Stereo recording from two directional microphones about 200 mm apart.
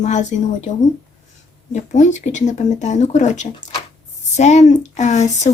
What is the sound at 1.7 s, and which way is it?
A woman's voice, 35° left (ahead or behind).